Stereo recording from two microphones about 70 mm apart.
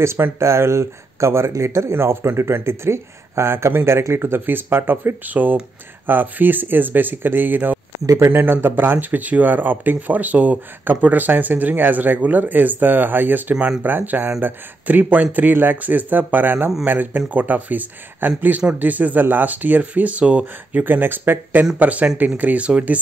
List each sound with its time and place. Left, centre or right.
0.0 s speech: right; by 20.8 s centre
20.8 s speech: right